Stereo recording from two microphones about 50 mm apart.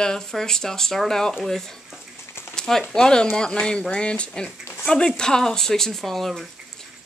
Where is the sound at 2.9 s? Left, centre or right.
Centre.